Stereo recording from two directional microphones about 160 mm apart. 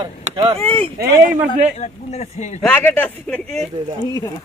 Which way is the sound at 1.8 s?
45° left (ahead or behind).